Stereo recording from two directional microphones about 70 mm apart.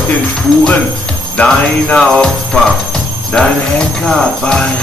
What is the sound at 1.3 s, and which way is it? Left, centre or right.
Speech, centre.